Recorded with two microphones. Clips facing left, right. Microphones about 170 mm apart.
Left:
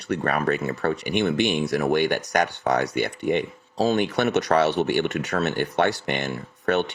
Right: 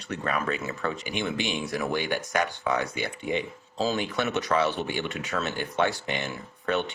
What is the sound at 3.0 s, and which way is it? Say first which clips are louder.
Speech: left 6 dB; 60° left (ahead or behind).